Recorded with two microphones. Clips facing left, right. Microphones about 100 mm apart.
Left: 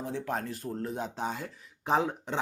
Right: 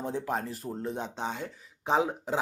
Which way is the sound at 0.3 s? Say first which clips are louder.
Right 1 dB; centre (ahead or behind).